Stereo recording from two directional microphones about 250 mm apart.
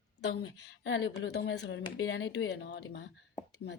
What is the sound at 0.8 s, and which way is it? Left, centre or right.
A woman's voice, left.